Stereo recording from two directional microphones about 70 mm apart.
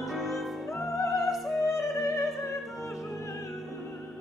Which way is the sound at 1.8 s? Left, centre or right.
Left.